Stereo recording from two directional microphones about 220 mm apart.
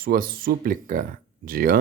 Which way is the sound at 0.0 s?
40° right (ahead or behind).